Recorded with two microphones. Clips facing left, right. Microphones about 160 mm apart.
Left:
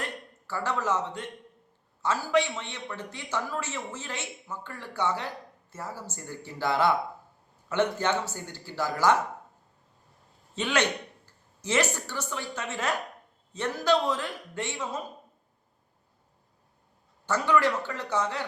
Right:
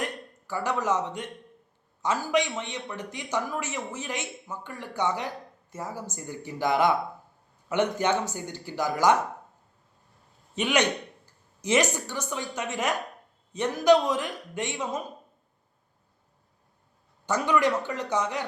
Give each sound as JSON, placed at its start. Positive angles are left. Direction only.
{"t": 0.0, "sound": "a man's voice", "side_deg": -15}
{"t": 10.5, "sound": "a man's voice", "side_deg": -15}
{"t": 17.2, "sound": "a man's voice", "side_deg": -15}